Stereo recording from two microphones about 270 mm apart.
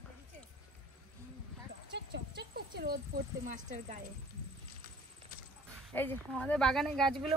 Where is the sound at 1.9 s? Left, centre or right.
Right.